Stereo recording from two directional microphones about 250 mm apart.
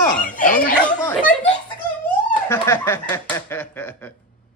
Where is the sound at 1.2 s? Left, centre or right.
Left.